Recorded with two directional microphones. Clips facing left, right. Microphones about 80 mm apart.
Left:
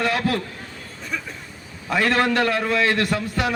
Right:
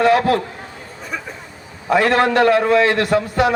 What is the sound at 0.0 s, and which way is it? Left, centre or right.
Speech, right.